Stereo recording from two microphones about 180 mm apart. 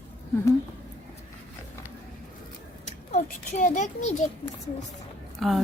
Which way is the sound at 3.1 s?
40° left (ahead or behind).